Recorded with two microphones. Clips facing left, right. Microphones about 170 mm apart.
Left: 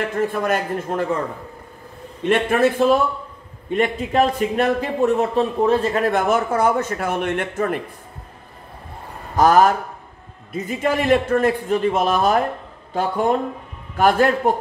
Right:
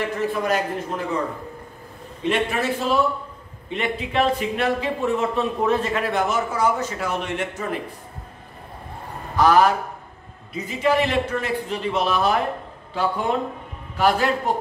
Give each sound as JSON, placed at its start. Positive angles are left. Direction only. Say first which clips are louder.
{"t": 0.3, "sound": "a man's voice", "louder": "left 1 dB", "side_deg": 50}
{"t": 2.2, "sound": "a man's voice", "louder": "left 5 dB", "side_deg": 50}
{"t": 9.4, "sound": "a man's voice", "louder": "left 2 dB", "side_deg": 45}